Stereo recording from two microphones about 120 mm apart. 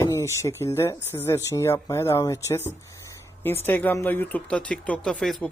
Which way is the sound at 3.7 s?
15° left (ahead or behind).